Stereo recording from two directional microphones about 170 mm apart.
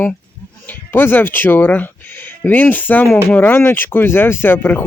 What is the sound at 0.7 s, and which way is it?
Speech, 10° left (ahead or behind).